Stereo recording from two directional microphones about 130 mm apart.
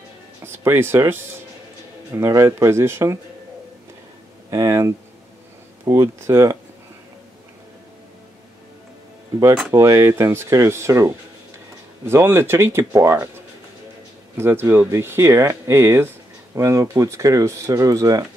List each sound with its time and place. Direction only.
0.5 s speech: 15° right (ahead or behind)
4.5 s speech: 25° right (ahead or behind)
9.7 s speech: 20° right (ahead or behind)
14.3 s speech: 20° right (ahead or behind)